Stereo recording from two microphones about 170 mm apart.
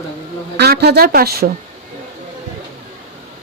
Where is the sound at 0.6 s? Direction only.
70° right (ahead or behind).